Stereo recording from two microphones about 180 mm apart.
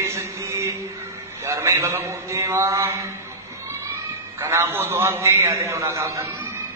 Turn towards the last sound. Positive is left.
turn(degrees=-15)  # may be behind; listen again after turning